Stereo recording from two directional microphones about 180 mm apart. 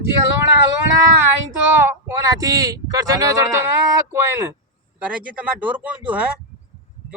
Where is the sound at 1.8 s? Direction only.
15° right (ahead or behind).